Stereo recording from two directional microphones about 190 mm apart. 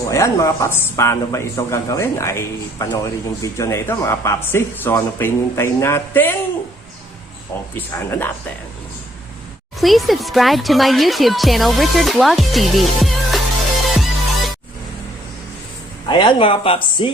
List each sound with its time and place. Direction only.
0.1 s speech: 15° left (ahead or behind)
7.8 s speech: 10° left (ahead or behind)
9.8 s speech: centre (ahead or behind)
13.9 s music: centre (ahead or behind)
16.0 s speech: 25° left (ahead or behind)